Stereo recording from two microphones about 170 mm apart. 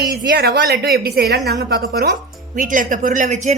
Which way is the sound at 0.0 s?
70° right (ahead or behind).